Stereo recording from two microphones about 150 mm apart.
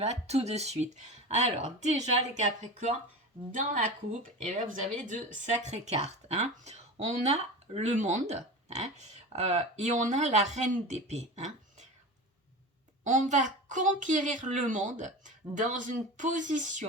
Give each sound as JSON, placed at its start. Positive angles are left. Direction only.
{"t": 0.0, "sound": "a woman's voice", "side_deg": -45}
{"t": 13.1, "sound": "a woman's voice", "side_deg": -55}